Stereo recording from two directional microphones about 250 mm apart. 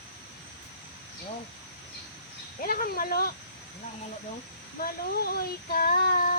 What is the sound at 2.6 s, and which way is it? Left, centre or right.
Child singing, left.